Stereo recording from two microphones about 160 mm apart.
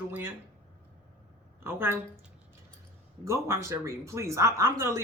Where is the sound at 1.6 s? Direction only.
15° right (ahead or behind).